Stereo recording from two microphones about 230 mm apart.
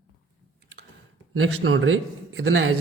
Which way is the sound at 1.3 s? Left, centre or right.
Right.